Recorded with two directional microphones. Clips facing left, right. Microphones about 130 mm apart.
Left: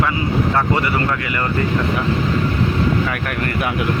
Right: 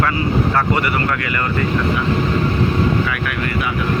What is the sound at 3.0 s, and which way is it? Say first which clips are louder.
Speech: even; 45° left (ahead or behind).